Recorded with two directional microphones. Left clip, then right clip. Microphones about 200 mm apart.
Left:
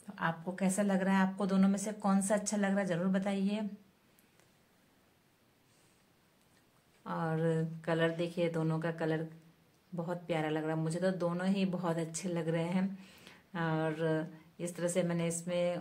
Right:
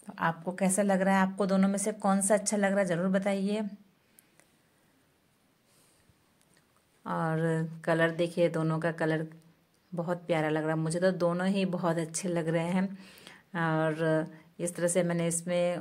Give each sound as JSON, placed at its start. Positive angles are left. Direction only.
{"t": 0.0, "sound": "speech", "side_deg": -30}
{"t": 7.0, "sound": "speech", "side_deg": -30}